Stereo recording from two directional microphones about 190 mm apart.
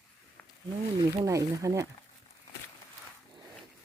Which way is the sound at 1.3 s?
15° right (ahead or behind).